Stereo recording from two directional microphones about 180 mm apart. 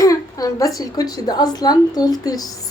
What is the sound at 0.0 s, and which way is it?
A woman's voice, 20° left (ahead or behind).